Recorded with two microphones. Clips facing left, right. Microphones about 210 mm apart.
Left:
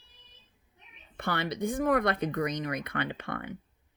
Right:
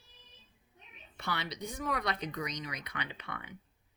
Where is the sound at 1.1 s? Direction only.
55° left (ahead or behind).